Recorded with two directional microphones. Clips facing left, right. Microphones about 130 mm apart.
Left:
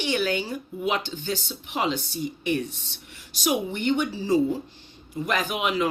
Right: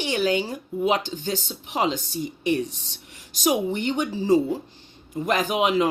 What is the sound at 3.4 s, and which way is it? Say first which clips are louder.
Speech: right 1 dB; 35° right (ahead or behind).